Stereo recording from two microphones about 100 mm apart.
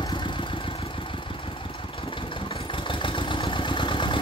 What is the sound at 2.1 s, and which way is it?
Vehicle, 60° left (ahead or behind).